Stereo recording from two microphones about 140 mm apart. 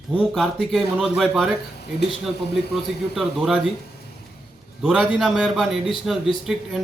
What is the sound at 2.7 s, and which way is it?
Speech, centre (ahead or behind).